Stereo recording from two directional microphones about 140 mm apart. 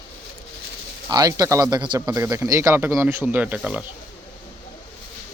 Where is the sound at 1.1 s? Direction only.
25° right (ahead or behind); by 3.8 s 5° right (ahead or behind).